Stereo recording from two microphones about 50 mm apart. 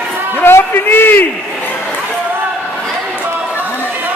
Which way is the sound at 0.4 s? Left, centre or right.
Left.